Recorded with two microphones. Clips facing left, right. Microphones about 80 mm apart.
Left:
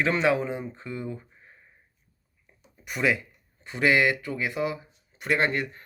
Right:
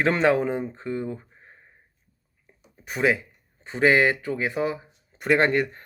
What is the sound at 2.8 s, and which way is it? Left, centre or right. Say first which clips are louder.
Speech: right 3 dB; right.